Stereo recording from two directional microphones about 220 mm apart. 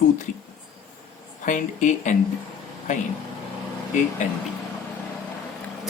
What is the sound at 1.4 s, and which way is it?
Speech, 35° left (ahead or behind).